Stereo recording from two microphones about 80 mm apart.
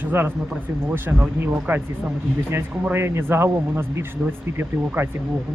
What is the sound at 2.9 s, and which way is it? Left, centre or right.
Speech, right.